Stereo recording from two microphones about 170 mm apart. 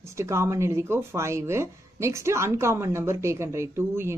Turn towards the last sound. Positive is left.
turn(degrees=-15)  # may be behind; listen again after turning